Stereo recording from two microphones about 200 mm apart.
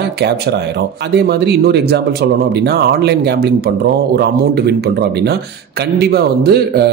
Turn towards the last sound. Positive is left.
turn(degrees=-55)  # may be behind; listen again after turning